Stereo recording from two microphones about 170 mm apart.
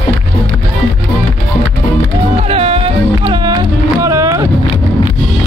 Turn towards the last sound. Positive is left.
turn(degrees=-20)  # may be behind; listen again after turning